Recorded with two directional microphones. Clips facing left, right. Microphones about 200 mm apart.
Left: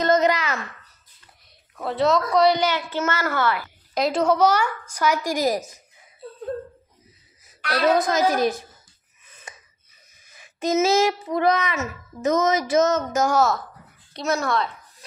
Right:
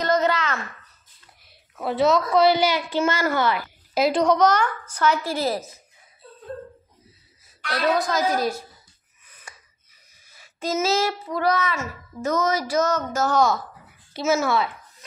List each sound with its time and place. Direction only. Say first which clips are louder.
0.0 s a sound: left 2 dB; 20° left (ahead or behind)
1.8 s a woman's voice: right 1 dB; 5° right (ahead or behind)
4.0 s a woman's voice: right 1 dB; 5° left (ahead or behind)
8.0 s a child's voice: left 3 dB; 20° left (ahead or behind)
9.3 s a sound: left 3 dB; 20° left (ahead or behind)
10.2 s a child's voice: left 4 dB; 20° left (ahead or behind)
14.1 s a child's voice: right 2 dB; 5° right (ahead or behind)